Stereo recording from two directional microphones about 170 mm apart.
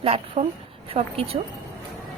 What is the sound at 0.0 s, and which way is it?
A woman's voice, 35° right (ahead or behind).